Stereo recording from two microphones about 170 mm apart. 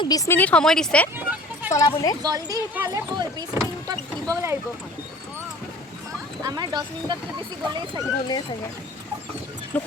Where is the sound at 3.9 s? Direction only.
20° right (ahead or behind).